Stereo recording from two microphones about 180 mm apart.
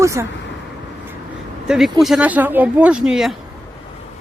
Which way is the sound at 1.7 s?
Centre (ahead or behind).